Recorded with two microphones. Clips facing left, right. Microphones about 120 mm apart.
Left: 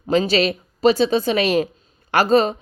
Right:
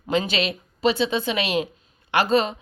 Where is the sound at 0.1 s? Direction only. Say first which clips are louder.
Left 6 dB; 35° left (ahead or behind).